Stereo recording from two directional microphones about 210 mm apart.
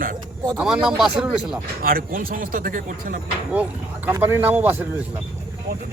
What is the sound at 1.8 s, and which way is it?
Speech, 45° right (ahead or behind).